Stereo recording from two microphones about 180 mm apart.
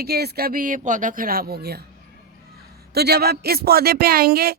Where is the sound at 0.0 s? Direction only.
65° right (ahead or behind).